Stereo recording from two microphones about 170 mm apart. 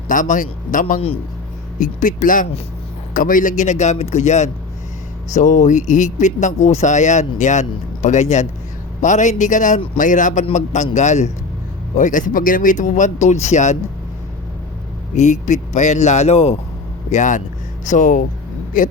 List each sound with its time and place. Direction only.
0.1 s speech: 50° left (ahead or behind)
15.1 s a man's voice: 45° left (ahead or behind)